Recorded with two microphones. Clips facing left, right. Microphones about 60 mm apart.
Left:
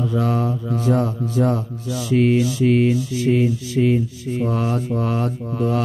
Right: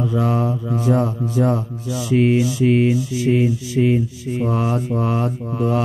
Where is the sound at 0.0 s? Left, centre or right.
Centre.